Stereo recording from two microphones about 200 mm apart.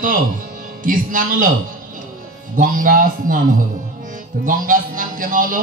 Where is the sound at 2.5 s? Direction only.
40° right (ahead or behind).